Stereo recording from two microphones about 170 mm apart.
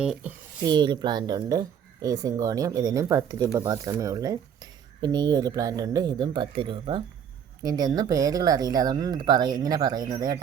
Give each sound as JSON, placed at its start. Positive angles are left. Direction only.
{"t": 0.0, "sound": "speech", "side_deg": -5}
{"t": 0.6, "sound": "speech", "side_deg": -25}